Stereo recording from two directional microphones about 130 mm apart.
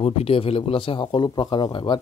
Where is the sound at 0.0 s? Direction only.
45° left (ahead or behind).